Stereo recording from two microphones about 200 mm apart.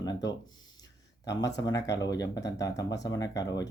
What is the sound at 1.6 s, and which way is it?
Speech, 20° left (ahead or behind).